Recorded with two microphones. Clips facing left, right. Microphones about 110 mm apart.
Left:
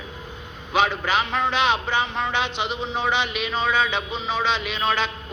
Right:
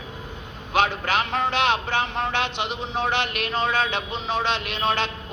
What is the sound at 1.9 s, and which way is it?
Speech, 55° right (ahead or behind).